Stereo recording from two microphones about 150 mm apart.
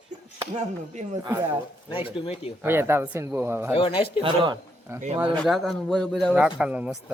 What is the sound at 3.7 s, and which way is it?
Speech, 40° left (ahead or behind).